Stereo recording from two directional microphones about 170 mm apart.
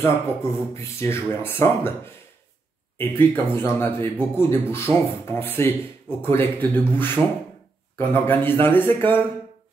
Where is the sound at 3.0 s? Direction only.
15° left (ahead or behind).